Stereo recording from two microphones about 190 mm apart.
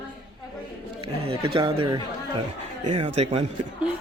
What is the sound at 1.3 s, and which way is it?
Speech, 25° right (ahead or behind).